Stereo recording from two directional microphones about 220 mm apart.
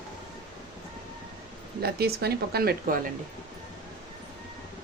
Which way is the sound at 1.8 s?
45° right (ahead or behind).